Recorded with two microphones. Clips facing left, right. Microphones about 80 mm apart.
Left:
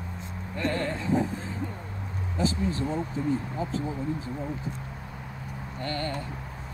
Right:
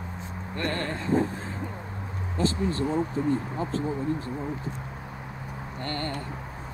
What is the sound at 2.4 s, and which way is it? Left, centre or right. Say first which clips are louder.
Speech: right 1 dB; centre.